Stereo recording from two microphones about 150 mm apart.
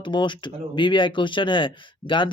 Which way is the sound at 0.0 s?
30° left (ahead or behind).